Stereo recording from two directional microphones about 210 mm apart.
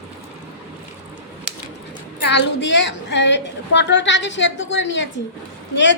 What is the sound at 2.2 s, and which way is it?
A woman's voice, 55° left (ahead or behind).